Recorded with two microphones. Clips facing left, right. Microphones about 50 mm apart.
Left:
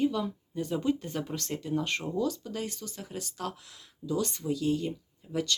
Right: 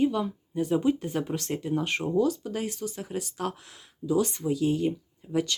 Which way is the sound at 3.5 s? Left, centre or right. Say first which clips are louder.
Right 2 dB; right.